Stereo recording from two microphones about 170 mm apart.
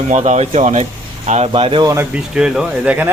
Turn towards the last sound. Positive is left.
turn(degrees=-10)  # may be behind; listen again after turning